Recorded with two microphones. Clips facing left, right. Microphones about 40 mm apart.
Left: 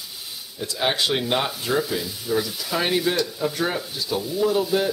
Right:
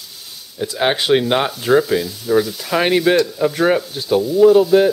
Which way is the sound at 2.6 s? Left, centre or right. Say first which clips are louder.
Right 7 dB; right.